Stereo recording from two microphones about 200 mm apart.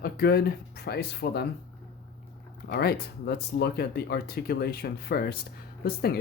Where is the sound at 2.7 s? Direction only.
50° left (ahead or behind).